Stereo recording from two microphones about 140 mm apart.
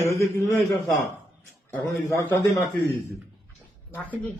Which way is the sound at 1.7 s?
20° left (ahead or behind).